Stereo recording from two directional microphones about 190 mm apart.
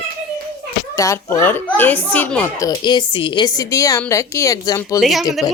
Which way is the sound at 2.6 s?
20° left (ahead or behind).